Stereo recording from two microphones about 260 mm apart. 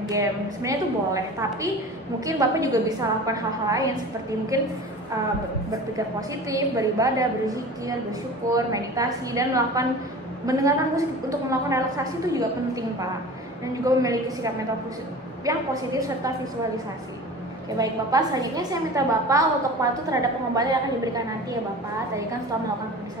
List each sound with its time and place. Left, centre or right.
0.1 s a woman's voice: centre
6.5 s a woman's voice: centre
13.8 s a woman's voice: centre